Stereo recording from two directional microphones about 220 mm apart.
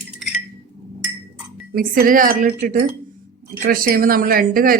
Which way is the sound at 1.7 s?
40° right (ahead or behind).